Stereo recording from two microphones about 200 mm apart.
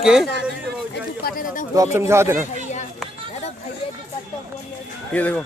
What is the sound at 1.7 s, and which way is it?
Speech, 15° right (ahead or behind).